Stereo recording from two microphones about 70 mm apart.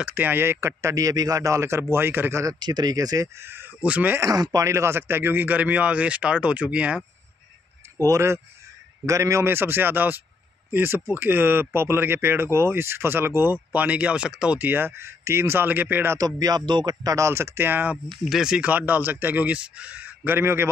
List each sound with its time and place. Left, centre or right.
0.1 s speech: right
2.6 s speech: right
3.3 s speech: right
3.8 s speech: right
4.2 s speech: right
4.6 s speech: right; by 7.0 s centre
8.1 s speech: right; by 14.6 s centre
14.6 s speech: right
16.2 s speech: right
17.1 s speech: right
18.0 s speech: centre
18.6 s speech: right